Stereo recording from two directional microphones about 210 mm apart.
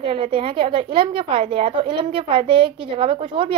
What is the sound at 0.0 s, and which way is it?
A woman's voice, 25° right (ahead or behind).